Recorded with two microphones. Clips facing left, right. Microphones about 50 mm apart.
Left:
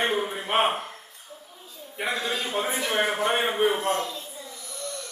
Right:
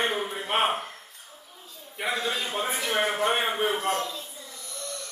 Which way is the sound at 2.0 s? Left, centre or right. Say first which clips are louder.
Even; centre.